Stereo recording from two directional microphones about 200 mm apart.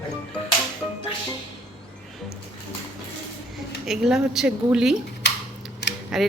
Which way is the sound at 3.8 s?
Centre (ahead or behind).